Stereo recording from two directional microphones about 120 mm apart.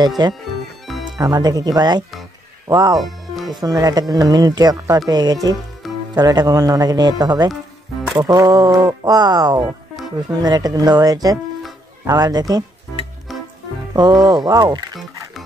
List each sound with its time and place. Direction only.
0.2 s speech: 35° right (ahead or behind)
3.0 s music: centre (ahead or behind)
3.6 s speech: 30° right (ahead or behind)
13.3 s music: centre (ahead or behind)
13.9 s speech: 35° right (ahead or behind)